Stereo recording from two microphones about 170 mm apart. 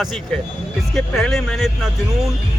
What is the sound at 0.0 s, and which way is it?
A man's voice, centre (ahead or behind).